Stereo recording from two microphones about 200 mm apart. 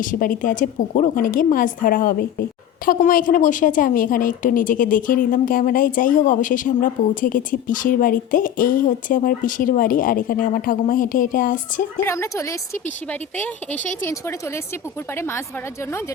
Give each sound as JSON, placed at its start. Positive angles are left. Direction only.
{"t": 0.0, "sound": "a woman's voice", "side_deg": 45}
{"t": 12.0, "sound": "speech", "side_deg": 15}